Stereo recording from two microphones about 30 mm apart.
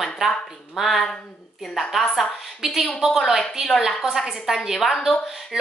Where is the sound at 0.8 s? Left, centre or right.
Centre.